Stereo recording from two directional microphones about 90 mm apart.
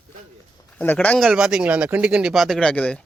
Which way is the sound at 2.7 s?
15° left (ahead or behind).